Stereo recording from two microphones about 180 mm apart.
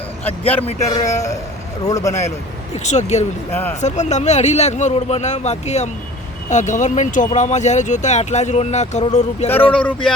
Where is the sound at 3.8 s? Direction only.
40° left (ahead or behind).